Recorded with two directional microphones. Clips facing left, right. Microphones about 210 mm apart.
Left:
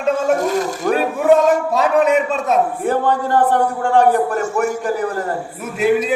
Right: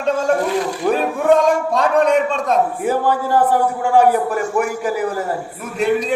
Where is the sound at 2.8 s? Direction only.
5° right (ahead or behind).